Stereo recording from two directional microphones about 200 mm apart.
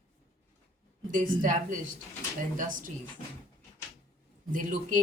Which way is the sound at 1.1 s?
40° right (ahead or behind).